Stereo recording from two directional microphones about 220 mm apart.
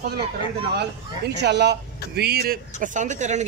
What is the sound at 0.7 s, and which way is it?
Speech, 50° right (ahead or behind).